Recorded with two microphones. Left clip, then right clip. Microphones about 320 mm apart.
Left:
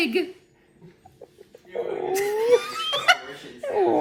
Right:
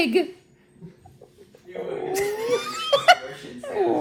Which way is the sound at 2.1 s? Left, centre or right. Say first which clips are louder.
Left 5 dB; centre.